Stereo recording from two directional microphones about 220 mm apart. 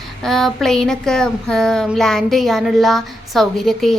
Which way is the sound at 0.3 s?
Centre (ahead or behind).